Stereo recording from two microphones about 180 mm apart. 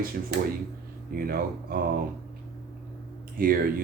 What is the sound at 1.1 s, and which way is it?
Speech, 55° right (ahead or behind).